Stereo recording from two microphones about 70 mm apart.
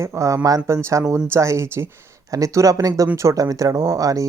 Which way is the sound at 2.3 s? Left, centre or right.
Right.